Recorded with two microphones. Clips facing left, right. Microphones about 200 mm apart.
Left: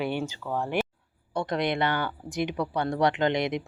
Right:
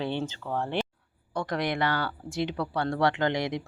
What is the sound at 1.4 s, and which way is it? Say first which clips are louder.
Speech: left 2 dB; 20° left (ahead or behind).